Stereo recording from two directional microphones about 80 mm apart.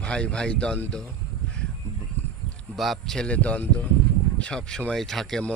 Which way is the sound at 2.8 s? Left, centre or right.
Centre.